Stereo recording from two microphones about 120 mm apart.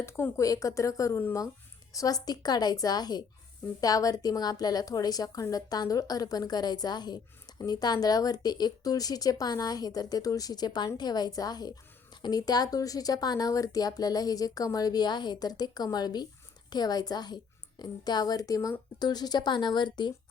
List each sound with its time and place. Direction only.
0.0 s a woman's voice: 20° left (ahead or behind); by 20.1 s 40° left (ahead or behind)